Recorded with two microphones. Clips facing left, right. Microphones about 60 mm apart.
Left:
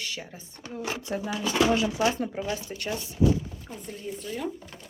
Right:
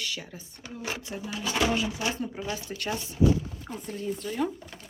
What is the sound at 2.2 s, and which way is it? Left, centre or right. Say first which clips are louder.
Speech: left 3 dB; left.